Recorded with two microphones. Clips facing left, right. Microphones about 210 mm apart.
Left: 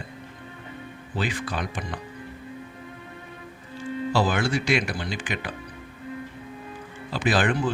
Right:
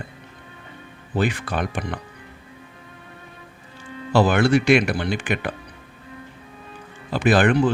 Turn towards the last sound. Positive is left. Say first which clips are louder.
# right 6 dB
turn(degrees=-65)  # may be behind; listen again after turning